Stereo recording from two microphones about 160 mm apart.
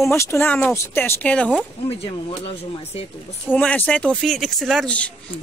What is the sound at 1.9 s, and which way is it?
Speech, 35° left (ahead or behind).